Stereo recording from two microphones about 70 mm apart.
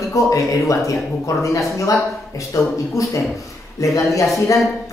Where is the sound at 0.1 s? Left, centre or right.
Left.